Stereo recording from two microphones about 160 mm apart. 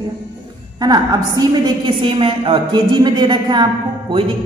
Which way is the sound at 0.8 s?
25° right (ahead or behind).